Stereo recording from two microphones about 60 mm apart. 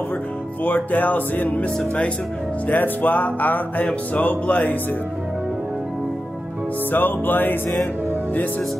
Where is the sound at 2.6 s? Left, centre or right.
Left.